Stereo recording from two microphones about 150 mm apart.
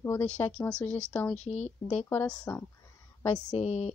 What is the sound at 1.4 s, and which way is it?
Speech, 50° left (ahead or behind).